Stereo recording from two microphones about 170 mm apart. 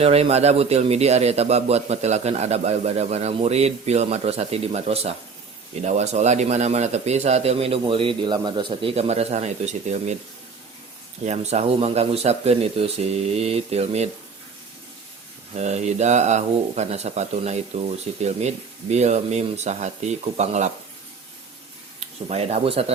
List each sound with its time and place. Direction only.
0.0 s a man's voice: 35° right (ahead or behind)
11.3 s a man's voice: 40° right (ahead or behind)
15.5 s a man's voice: 40° right (ahead or behind)
22.3 s a man's voice: 35° right (ahead or behind)